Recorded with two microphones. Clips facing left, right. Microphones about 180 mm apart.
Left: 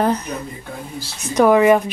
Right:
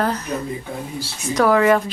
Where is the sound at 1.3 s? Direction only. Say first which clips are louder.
Left 3 dB; 20° left (ahead or behind).